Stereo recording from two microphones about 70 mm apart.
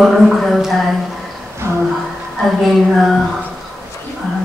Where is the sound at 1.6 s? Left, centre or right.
Right.